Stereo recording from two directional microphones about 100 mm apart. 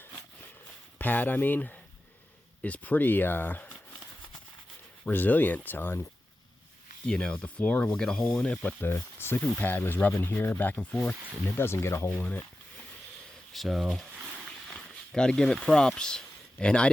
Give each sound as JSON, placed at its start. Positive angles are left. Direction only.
{"t": 0.9, "sound": "speech", "side_deg": 20}
{"t": 5.0, "sound": "speech", "side_deg": 15}
{"t": 7.0, "sound": "speech", "side_deg": 10}
{"t": 13.5, "sound": "speech", "side_deg": 0}